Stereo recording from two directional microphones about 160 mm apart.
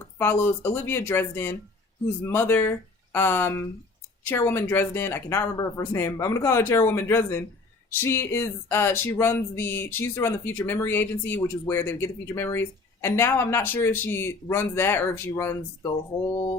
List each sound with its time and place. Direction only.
0.2 s speech: 15° left (ahead or behind)